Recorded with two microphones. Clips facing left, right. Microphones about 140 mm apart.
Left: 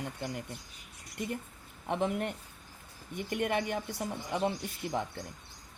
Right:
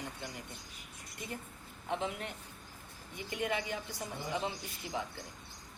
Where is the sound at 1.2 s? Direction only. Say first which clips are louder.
Left 7 dB; 65° left (ahead or behind).